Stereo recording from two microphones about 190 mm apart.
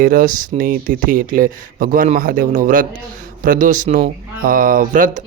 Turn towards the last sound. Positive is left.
turn(degrees=-45)  # may be behind; listen again after turning